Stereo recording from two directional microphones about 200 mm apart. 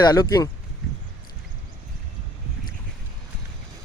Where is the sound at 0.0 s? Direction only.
20° left (ahead or behind).